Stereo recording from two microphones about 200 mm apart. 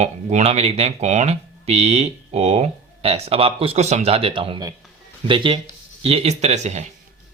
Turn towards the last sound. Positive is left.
turn(degrees=-35)  # may be behind; listen again after turning